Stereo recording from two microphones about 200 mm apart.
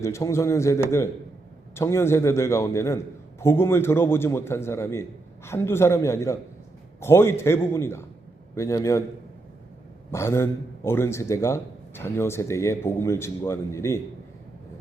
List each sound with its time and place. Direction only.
0.0 s a man's voice: 15° left (ahead or behind)
10.1 s a man's voice: 15° left (ahead or behind)